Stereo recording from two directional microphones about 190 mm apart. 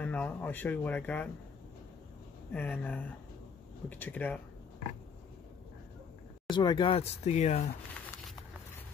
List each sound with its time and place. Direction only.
0.0 s speech: 5° left (ahead or behind)
2.5 s speech: 10° left (ahead or behind)
6.5 s speech: 25° left (ahead or behind)